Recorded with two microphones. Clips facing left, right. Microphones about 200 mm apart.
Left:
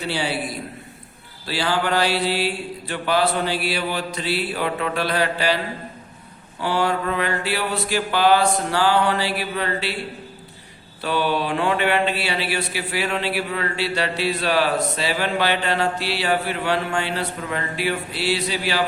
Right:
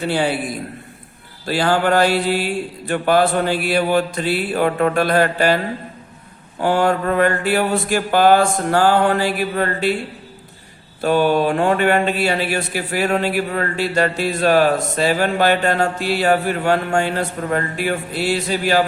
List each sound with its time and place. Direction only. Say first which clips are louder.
0.0 s speech: right 5 dB; 50° right (ahead or behind)
6.6 s speech: right 5 dB; 50° right (ahead or behind)
11.0 s speech: right 7 dB; 45° right (ahead or behind)